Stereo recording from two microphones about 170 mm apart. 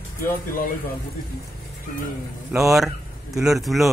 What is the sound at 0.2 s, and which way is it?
Speech, 55° left (ahead or behind).